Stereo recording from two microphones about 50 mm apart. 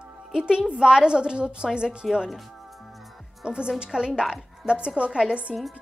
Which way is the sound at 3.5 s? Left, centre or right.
Centre.